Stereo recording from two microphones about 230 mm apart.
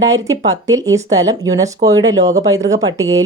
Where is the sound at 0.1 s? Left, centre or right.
Centre.